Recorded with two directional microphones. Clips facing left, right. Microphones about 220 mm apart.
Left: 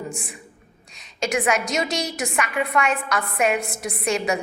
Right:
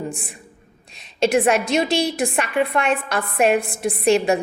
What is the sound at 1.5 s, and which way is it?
A woman's voice, 30° right (ahead or behind).